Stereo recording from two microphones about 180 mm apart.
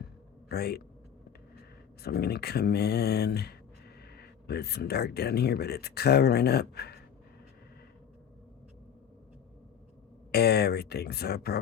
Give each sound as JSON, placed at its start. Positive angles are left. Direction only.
{"t": 0.4, "sound": "speech", "side_deg": 60}
{"t": 2.0, "sound": "speech", "side_deg": 60}
{"t": 10.3, "sound": "speech", "side_deg": 60}